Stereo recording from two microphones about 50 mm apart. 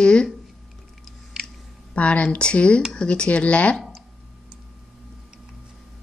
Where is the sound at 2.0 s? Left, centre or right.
Left.